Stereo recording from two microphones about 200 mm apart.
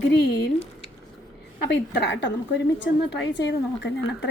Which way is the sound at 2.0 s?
60° left (ahead or behind).